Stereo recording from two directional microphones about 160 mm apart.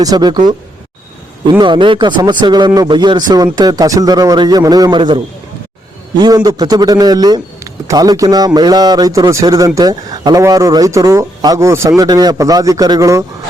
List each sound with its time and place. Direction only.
0.0 s a man's voice: 25° right (ahead or behind)
1.5 s a man's voice: 30° right (ahead or behind)